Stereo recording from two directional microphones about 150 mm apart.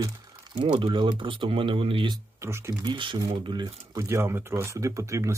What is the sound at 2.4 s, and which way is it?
Speech, 15° right (ahead or behind).